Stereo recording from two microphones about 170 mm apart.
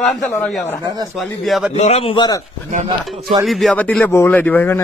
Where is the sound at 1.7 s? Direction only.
40° left (ahead or behind).